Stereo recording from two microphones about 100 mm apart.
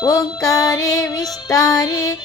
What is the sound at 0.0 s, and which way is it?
Music, 40° left (ahead or behind).